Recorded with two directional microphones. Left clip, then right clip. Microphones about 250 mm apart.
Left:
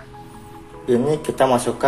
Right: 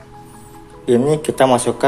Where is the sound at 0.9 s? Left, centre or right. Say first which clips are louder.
Right 4 dB; right.